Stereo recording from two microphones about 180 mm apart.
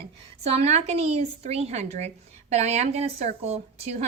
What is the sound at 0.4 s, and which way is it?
A woman's voice, 35° right (ahead or behind).